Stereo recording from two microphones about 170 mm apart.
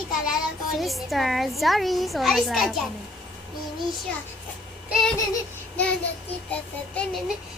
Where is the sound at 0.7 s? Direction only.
Centre (ahead or behind).